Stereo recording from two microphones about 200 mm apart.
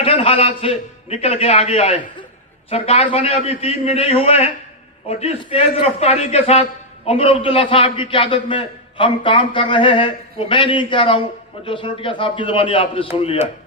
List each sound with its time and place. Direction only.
0.0 s a man's voice: 30° left (ahead or behind)